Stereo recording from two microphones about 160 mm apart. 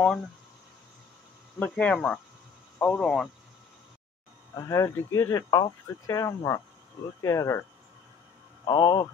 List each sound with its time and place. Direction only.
1.6 s speech: 5° left (ahead or behind)
4.6 s speech: 20° left (ahead or behind)
8.6 s speech: 25° left (ahead or behind)